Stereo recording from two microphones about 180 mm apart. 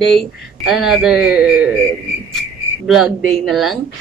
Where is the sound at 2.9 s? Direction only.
Centre (ahead or behind).